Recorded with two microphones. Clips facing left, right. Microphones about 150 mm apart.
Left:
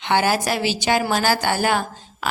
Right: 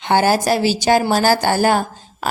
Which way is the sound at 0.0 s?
40° right (ahead or behind).